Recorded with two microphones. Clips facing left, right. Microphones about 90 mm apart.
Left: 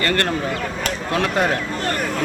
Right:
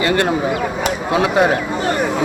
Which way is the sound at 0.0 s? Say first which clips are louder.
Right 4 dB; 10° right (ahead or behind).